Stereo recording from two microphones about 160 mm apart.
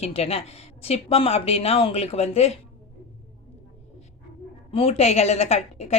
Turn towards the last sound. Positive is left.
turn(degrees=40)  # may be behind; listen again after turning